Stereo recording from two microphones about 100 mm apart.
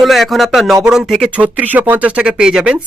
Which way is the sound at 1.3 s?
15° right (ahead or behind).